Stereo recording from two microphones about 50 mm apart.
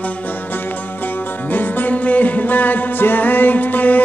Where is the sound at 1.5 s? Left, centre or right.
Left.